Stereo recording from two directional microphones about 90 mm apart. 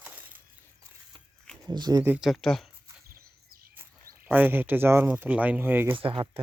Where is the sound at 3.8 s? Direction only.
20° right (ahead or behind).